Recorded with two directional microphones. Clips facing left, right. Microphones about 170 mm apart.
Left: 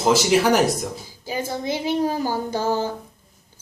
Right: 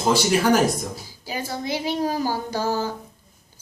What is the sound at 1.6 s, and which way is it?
A woman's voice, 20° left (ahead or behind).